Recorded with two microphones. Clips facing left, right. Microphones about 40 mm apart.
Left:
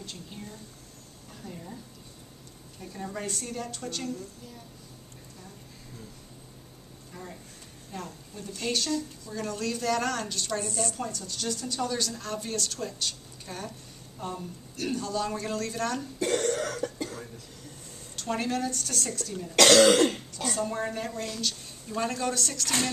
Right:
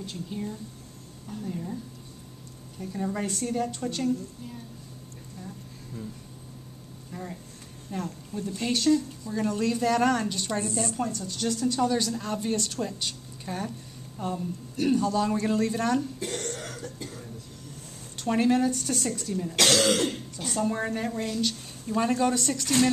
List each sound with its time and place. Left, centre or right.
0.0 s a woman's voice: centre
2.8 s speech: centre
7.1 s speech: centre
8.5 s speech: centre
11.1 s speech: centre
16.5 s cough: left
18.1 s speech: centre
19.5 s cough: left
19.9 s speech: left
20.5 s speech: centre